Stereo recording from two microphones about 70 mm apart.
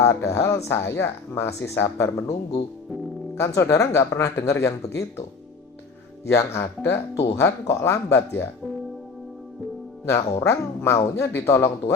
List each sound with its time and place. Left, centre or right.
0.0 s speech: left
3.3 s speech: left
6.2 s speech: left
10.1 s speech: left